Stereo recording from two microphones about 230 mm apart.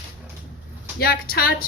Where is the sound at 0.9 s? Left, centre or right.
Left.